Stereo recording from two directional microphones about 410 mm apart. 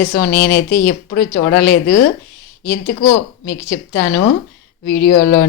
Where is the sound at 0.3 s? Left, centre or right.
Left.